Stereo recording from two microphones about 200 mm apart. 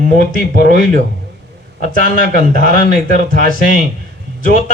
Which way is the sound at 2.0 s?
45° right (ahead or behind).